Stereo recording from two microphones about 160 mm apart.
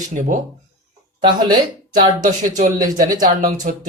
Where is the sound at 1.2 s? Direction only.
25° right (ahead or behind).